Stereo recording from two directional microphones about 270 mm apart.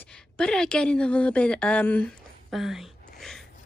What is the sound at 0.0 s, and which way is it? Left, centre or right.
A woman's voice, centre.